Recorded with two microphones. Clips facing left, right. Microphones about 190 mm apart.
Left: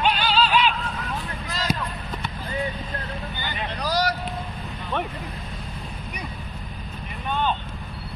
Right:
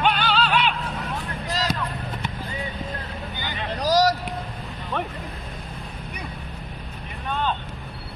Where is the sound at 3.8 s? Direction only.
40° right (ahead or behind).